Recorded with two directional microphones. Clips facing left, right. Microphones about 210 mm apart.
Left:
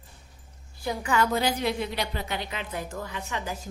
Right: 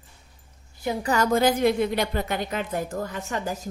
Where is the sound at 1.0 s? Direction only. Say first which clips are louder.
Right 4 dB; 40° right (ahead or behind).